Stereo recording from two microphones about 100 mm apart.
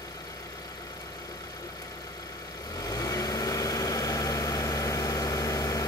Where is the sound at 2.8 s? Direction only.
35° left (ahead or behind).